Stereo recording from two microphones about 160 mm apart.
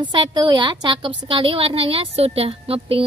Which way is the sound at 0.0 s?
30° right (ahead or behind).